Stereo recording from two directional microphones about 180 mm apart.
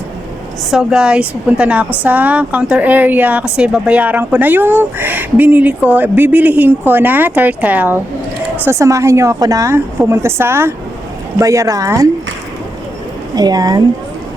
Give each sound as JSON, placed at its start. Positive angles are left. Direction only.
{"t": 0.7, "sound": "speech", "side_deg": -5}
{"t": 13.3, "sound": "speech", "side_deg": -20}